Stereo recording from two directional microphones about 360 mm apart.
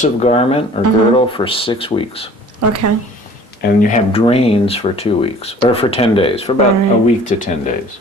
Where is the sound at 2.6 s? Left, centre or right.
Right.